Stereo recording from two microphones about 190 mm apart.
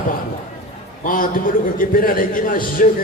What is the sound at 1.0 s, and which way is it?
A man's voice, 45° left (ahead or behind).